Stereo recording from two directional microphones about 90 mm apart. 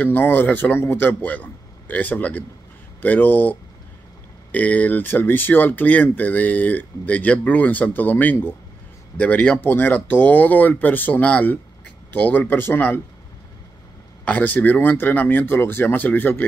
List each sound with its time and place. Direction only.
0.0 s speech: 20° left (ahead or behind)
14.2 s speech: 20° left (ahead or behind)